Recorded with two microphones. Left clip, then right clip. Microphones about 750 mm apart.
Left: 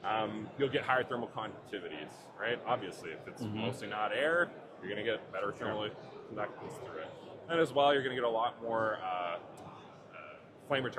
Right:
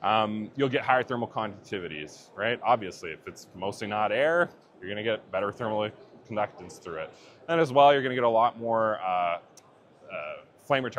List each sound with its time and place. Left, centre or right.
0.0 s speech: right
10.1 s a sound: right
10.7 s speech: right